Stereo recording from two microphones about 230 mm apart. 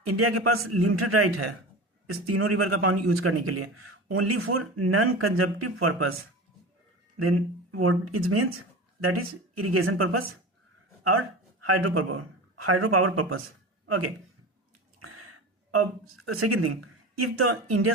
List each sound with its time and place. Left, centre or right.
0.2 s speech: right
2.0 s speech: right
7.2 s speech: right
9.6 s speech: right
11.6 s speech: right
15.0 s a sound: right
15.7 s speech: right